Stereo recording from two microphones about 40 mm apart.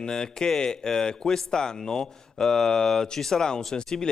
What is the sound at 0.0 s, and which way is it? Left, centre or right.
Speech, centre.